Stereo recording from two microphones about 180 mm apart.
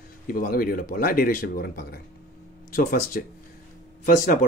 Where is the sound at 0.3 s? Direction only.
50° left (ahead or behind).